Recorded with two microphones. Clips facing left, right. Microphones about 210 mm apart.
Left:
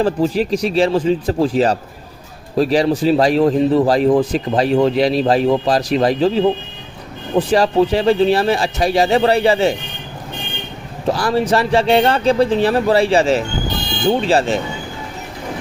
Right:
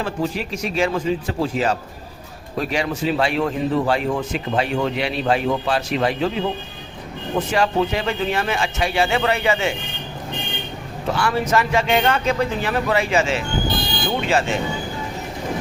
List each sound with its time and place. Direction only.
0.0 s a man's voice: 35° left (ahead or behind)
11.1 s a man's voice: 35° left (ahead or behind)